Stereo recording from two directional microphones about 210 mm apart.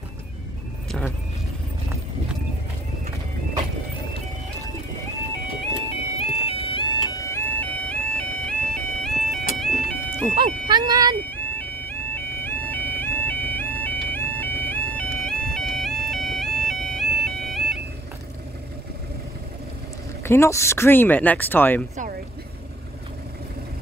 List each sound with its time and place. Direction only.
6.1 s music: 25° left (ahead or behind); by 10.3 s 5° left (ahead or behind)
10.3 s speech: 20° right (ahead or behind)
11.2 s music: 10° left (ahead or behind)
20.2 s speech: 15° left (ahead or behind)